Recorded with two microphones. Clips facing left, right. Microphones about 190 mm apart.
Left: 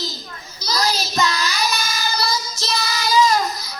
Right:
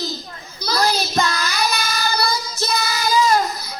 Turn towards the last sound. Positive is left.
turn(degrees=-55)  # may be behind; listen again after turning